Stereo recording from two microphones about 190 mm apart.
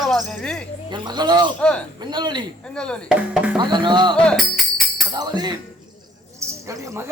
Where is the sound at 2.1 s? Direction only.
25° right (ahead or behind).